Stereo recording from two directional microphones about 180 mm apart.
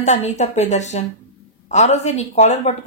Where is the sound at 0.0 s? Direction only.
40° left (ahead or behind).